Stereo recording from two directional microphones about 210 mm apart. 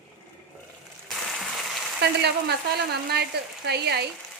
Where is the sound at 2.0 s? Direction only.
50° right (ahead or behind).